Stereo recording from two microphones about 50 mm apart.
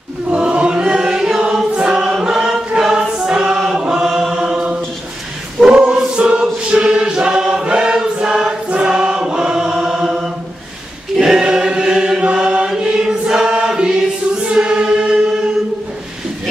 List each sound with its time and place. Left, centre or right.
0.3 s choir: right
3.5 s chant: centre
5.6 s choir: right
9.8 s chant: centre
11.1 s choir: centre